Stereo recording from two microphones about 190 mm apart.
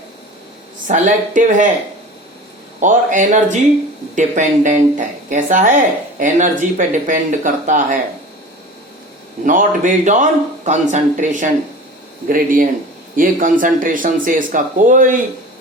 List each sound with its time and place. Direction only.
0.9 s speech: 40° right (ahead or behind)
2.8 s speech: 40° right (ahead or behind)
9.4 s speech: 45° right (ahead or behind)